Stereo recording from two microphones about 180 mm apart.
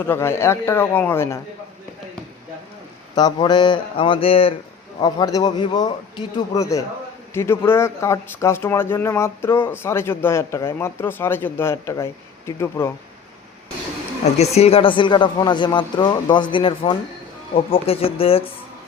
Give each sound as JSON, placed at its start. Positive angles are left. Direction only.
{"t": 0.1, "sound": "speech", "side_deg": 15}
{"t": 3.2, "sound": "speech", "side_deg": 25}
{"t": 4.9, "sound": "speech", "side_deg": 20}
{"t": 14.5, "sound": "speech", "side_deg": 35}